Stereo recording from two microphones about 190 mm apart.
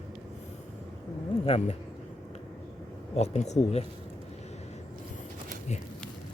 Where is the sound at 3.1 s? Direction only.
35° left (ahead or behind).